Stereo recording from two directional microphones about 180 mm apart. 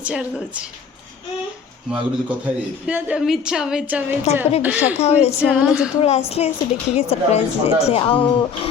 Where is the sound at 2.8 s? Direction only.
5° right (ahead or behind).